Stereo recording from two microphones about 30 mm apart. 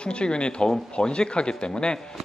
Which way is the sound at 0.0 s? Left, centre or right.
Left.